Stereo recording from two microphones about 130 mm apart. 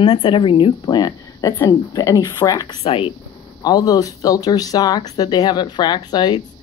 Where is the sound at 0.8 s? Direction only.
30° left (ahead or behind).